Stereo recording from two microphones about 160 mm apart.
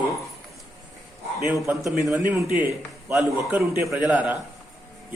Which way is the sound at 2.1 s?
10° right (ahead or behind).